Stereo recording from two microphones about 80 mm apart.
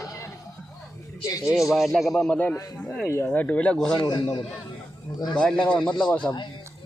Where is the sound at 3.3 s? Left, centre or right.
Centre.